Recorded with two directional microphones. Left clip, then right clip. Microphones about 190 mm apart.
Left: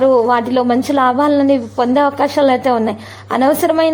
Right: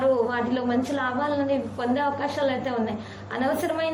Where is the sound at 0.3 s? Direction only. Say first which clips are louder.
Left 12 dB; 45° left (ahead or behind).